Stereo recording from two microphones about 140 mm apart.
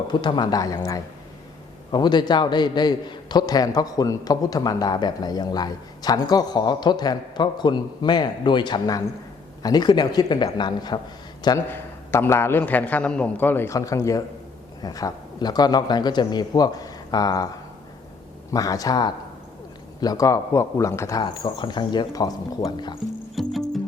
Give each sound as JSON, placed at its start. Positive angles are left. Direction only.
{"t": 0.1, "sound": "a man's voice", "side_deg": 35}
{"t": 11.4, "sound": "a man's voice", "side_deg": 20}
{"t": 18.5, "sound": "a man's voice", "side_deg": 25}
{"t": 21.2, "sound": "speech", "side_deg": 35}
{"t": 23.3, "sound": "music", "side_deg": 0}